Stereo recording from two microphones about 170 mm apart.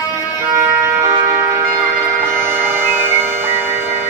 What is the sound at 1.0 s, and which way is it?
Music, 25° right (ahead or behind).